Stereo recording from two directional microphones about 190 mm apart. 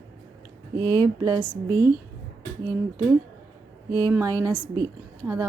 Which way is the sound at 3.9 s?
15° right (ahead or behind).